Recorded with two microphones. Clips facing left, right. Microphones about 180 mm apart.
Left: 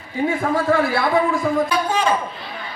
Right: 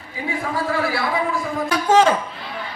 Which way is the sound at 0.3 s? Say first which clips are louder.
Left 4 dB; 50° left (ahead or behind).